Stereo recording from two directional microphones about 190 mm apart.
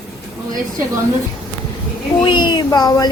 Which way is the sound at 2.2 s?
25° left (ahead or behind).